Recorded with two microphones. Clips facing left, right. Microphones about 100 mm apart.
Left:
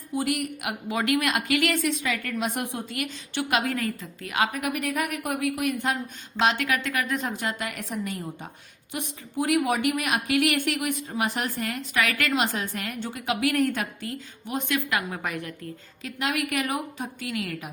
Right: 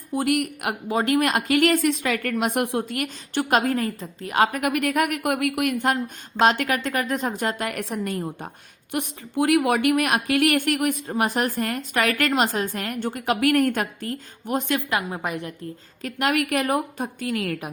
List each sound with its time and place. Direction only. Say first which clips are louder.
0.1 s a woman's voice: right 4 dB; 50° right (ahead or behind)
0.9 s a woman's voice: right 4 dB; 35° right (ahead or behind)
4.5 s a woman's voice: right 5 dB; 60° right (ahead or behind)
8.9 s a woman's voice: right 6 dB; 60° right (ahead or behind); by 14.8 s 45° right (ahead or behind)
14.8 s a woman's voice: right 3 dB; 25° right (ahead or behind)
16.0 s a woman's voice: right 5 dB; 55° right (ahead or behind)